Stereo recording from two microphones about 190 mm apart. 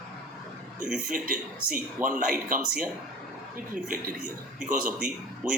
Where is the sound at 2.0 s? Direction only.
45° right (ahead or behind).